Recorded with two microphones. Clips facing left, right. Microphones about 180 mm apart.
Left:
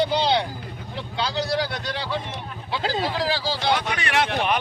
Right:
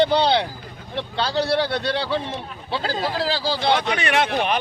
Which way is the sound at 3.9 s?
25° right (ahead or behind).